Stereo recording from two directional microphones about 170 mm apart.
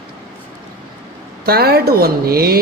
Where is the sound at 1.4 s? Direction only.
65° right (ahead or behind).